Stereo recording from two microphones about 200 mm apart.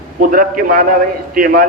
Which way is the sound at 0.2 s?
45° right (ahead or behind).